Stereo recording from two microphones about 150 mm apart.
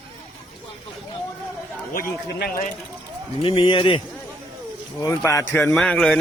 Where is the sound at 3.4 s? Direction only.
35° left (ahead or behind).